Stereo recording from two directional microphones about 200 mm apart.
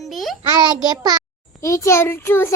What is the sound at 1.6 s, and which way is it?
Speech, 15° left (ahead or behind).